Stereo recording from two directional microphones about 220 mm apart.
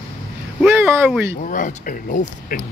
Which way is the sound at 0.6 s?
10° right (ahead or behind).